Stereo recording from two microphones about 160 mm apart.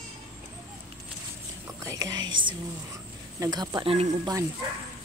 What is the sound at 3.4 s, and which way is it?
Speech, 25° right (ahead or behind).